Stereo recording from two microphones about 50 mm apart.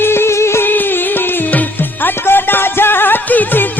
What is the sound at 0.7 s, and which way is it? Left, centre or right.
Music, left.